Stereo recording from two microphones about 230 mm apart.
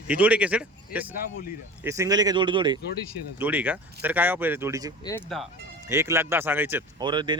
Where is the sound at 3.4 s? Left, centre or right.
Centre.